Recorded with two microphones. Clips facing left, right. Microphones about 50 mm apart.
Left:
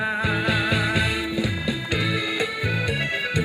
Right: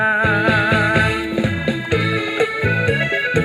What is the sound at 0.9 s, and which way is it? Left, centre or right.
Music, right.